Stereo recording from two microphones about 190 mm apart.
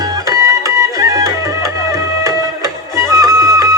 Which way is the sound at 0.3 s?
15° right (ahead or behind).